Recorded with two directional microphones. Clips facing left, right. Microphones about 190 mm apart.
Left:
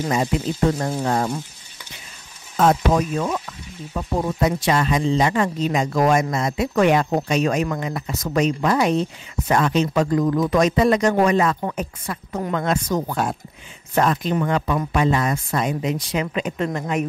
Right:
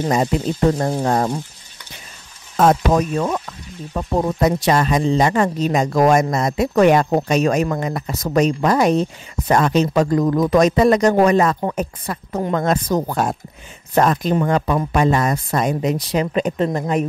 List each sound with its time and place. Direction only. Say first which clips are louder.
0.1 s speech: right 3 dB; 40° right (ahead or behind)
2.5 s speech: right 2 dB; 45° right (ahead or behind)